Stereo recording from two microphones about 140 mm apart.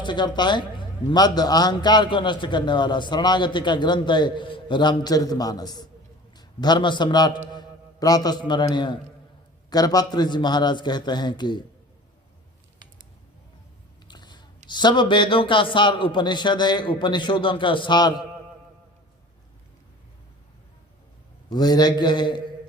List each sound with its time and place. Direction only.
0.0 s a man's voice: 35° left (ahead or behind)
14.1 s a sound: 30° left (ahead or behind)
14.7 s a man's voice: 30° left (ahead or behind)
21.5 s a man's voice: 30° left (ahead or behind)